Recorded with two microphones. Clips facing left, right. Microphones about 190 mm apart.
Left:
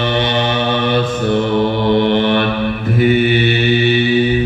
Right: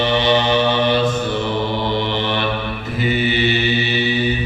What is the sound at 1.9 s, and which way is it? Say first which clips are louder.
Mantra: left 8 dB; 55° left (ahead or behind).